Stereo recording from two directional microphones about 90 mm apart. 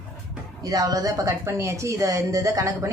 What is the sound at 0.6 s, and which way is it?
A woman's voice, 45° right (ahead or behind).